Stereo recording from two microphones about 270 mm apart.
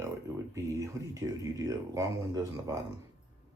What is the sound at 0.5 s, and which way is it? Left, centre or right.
Speech, centre.